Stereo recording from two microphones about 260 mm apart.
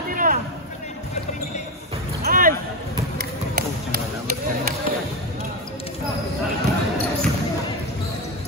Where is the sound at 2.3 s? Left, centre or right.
Right.